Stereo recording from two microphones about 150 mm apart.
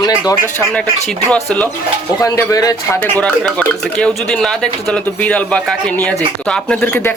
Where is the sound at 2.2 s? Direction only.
25° left (ahead or behind).